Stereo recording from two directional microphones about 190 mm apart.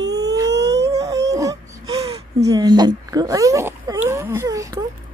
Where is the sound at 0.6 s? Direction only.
65° right (ahead or behind).